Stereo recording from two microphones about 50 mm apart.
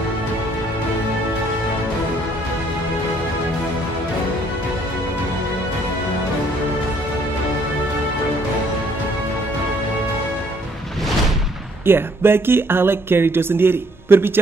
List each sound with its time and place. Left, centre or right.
11.8 s speech: right